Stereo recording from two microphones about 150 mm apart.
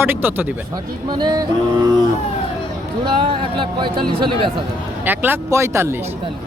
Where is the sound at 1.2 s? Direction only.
30° right (ahead or behind).